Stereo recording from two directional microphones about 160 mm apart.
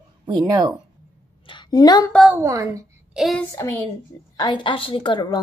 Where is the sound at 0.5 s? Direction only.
25° right (ahead or behind).